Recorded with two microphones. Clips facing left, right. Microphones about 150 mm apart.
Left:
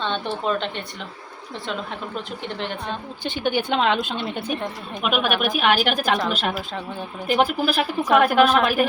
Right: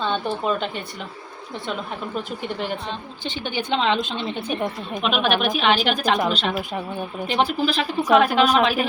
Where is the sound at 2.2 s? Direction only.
5° right (ahead or behind).